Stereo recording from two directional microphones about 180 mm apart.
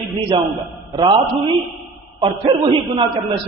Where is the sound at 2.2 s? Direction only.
30° right (ahead or behind).